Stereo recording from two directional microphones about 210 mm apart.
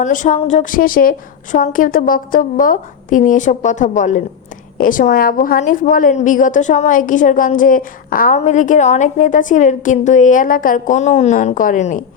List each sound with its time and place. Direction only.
0.0 s a woman's voice: 35° left (ahead or behind)